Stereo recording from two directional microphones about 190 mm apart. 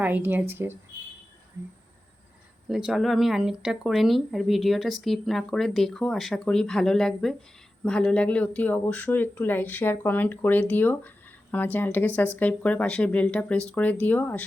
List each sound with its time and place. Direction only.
0.0 s speech: 10° right (ahead or behind)
2.6 s speech: centre (ahead or behind)